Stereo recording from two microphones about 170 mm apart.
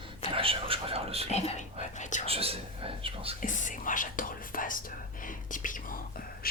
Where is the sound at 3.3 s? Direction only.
50° left (ahead or behind).